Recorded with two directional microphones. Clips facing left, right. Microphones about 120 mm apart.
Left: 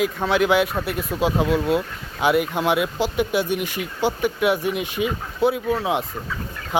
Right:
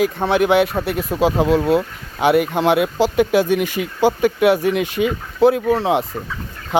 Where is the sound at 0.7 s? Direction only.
35° right (ahead or behind).